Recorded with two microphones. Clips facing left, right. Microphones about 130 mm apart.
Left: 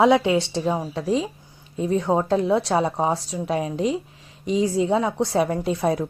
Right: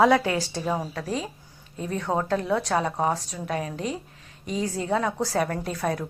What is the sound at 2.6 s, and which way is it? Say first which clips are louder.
A woman's voice: left 3 dB; 30° left (ahead or behind).